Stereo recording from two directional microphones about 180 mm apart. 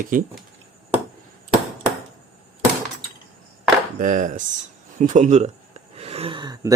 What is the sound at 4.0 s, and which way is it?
Speech, 45° right (ahead or behind).